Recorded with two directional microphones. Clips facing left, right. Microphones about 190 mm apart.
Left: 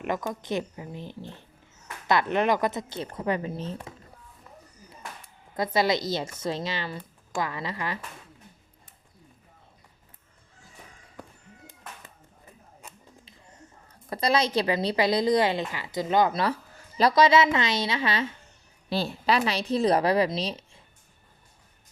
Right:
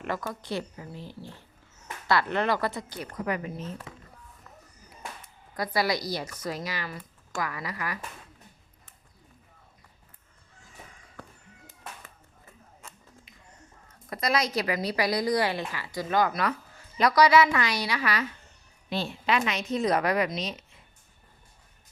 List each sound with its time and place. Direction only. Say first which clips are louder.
0.0 s a woman's voice: left 3 dB; 20° left (ahead or behind)
5.5 s a woman's voice: left 3 dB; 25° left (ahead or behind)
11.2 s a sound: left 2 dB; 15° left (ahead or behind)
13.8 s a woman's voice: left 3 dB; 30° left (ahead or behind)
18.9 s a woman's voice: left 3 dB; 35° left (ahead or behind)